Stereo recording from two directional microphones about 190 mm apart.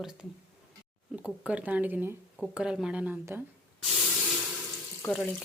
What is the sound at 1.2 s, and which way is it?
Speech, 5° right (ahead or behind).